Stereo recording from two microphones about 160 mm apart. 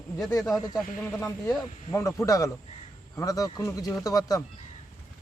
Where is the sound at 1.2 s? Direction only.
15° left (ahead or behind).